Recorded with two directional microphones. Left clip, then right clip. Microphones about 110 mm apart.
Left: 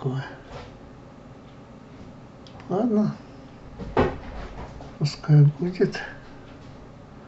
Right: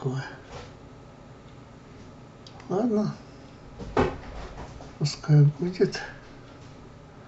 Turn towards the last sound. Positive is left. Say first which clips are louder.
# left 1 dB
turn(degrees=-10)  # may be behind; listen again after turning